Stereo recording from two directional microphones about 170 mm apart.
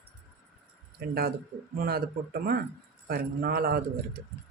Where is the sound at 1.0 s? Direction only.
65° right (ahead or behind).